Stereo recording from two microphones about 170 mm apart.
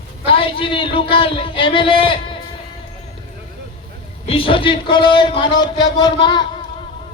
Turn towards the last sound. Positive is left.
turn(degrees=25)  # may be behind; listen again after turning